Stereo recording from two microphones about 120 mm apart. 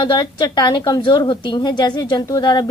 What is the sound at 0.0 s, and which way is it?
A woman's voice, 35° left (ahead or behind).